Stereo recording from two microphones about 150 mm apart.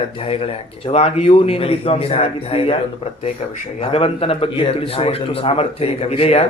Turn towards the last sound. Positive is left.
turn(degrees=40)  # may be behind; listen again after turning